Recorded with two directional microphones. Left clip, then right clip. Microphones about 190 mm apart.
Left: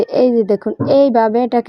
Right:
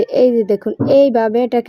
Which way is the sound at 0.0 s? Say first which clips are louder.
Even; 20° left (ahead or behind).